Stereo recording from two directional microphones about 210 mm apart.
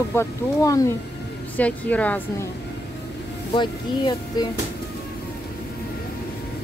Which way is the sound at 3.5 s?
20° left (ahead or behind).